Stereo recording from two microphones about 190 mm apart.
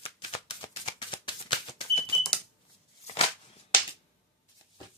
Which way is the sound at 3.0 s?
35° left (ahead or behind).